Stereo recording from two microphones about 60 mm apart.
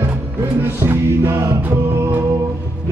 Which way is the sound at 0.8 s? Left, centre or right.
Right.